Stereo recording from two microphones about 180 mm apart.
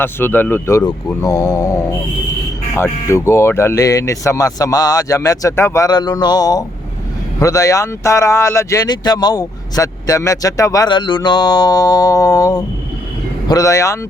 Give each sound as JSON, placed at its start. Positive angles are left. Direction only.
{"t": 0.0, "sound": "speech", "side_deg": 10}